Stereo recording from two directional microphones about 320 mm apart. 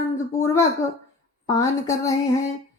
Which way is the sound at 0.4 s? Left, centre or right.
Centre.